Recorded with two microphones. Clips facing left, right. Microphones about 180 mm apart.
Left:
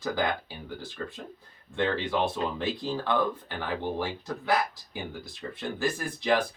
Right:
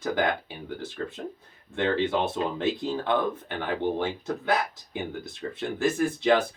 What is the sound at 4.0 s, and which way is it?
Speech, 20° right (ahead or behind).